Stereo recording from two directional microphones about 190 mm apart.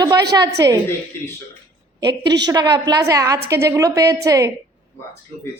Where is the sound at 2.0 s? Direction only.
65° right (ahead or behind).